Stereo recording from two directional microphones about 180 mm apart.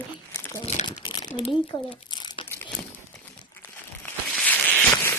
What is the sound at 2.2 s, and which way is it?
Crumpling, 25° left (ahead or behind).